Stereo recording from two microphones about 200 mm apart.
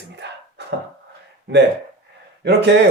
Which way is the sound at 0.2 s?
60° right (ahead or behind).